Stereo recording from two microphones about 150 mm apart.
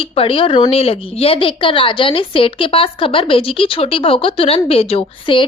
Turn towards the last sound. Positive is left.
turn(degrees=35)  # may be behind; listen again after turning